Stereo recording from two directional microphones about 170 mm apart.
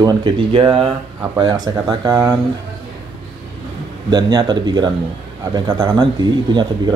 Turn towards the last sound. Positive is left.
turn(degrees=-25)  # may be behind; listen again after turning